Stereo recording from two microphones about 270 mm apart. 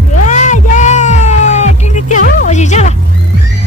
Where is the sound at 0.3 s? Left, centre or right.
Left.